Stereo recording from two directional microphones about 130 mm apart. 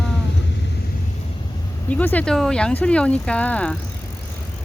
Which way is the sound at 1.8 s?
10° left (ahead or behind).